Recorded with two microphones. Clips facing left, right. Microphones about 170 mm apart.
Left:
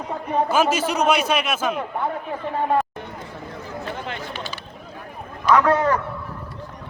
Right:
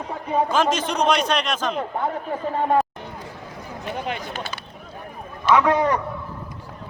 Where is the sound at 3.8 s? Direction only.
15° right (ahead or behind).